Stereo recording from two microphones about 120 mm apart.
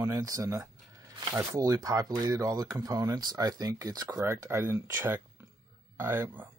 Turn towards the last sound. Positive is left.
turn(degrees=-20)  # may be behind; listen again after turning